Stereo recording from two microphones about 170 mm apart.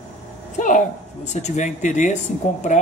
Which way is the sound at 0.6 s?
50° left (ahead or behind).